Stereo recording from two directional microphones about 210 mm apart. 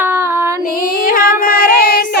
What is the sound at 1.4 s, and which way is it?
Child singing, 45° left (ahead or behind).